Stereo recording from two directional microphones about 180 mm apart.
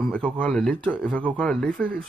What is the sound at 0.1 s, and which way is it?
Speech, 5° left (ahead or behind).